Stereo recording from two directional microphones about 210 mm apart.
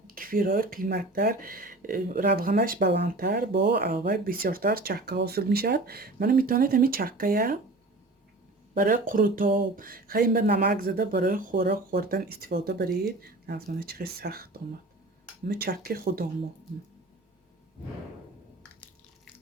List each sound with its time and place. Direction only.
0.1 s speech: 40° right (ahead or behind)
8.8 s speech: 40° right (ahead or behind)